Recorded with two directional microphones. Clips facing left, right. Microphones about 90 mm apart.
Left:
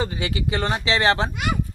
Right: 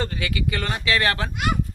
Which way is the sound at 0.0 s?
20° left (ahead or behind).